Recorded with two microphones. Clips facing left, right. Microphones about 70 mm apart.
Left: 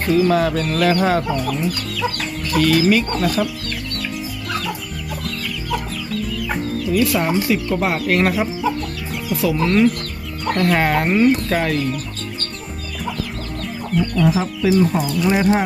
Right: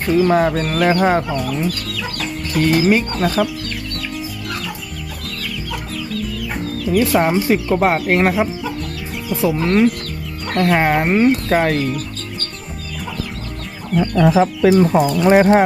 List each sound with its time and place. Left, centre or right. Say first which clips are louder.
0.3 s speech: right 2 dB; right
2.6 s speech: right 1 dB; right
6.9 s speech: right 3 dB; right
14.2 s speech: right 7 dB; right
15.2 s speech: right 5 dB; right